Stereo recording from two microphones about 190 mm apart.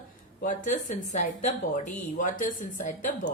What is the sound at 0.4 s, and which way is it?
A woman's voice, 45° left (ahead or behind).